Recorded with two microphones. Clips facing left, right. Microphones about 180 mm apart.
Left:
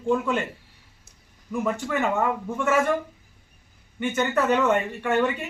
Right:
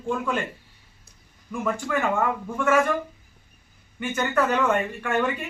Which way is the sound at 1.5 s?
20° left (ahead or behind).